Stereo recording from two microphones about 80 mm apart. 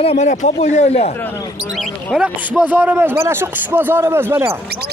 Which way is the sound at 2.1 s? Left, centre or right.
Centre.